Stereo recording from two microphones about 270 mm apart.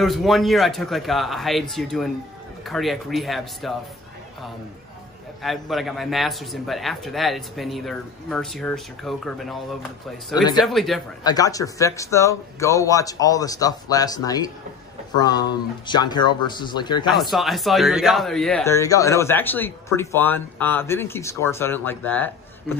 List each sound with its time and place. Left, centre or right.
0.0 s a man's voice: centre
5.4 s a man's voice: centre
10.3 s speech: centre
10.6 s a man's voice: centre
11.2 s speech: centre
17.1 s speech: centre